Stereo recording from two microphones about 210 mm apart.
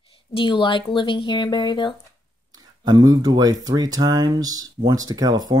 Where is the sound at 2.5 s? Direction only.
20° right (ahead or behind).